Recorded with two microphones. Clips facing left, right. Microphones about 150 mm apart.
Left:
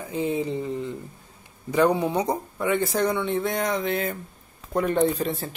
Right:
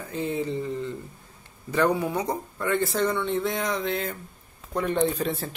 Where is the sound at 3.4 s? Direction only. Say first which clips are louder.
Left 2 dB; 50° left (ahead or behind).